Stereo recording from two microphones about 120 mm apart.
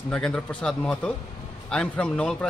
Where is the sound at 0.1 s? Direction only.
5° left (ahead or behind).